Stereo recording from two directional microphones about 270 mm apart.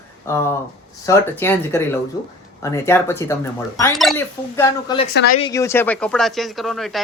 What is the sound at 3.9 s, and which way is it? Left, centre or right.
Speech, centre.